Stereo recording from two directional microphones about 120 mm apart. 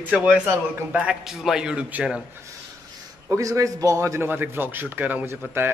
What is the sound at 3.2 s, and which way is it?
A man's voice, 25° right (ahead or behind).